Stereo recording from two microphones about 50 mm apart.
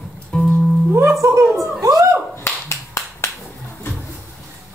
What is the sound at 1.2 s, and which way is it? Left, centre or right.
Speech, right.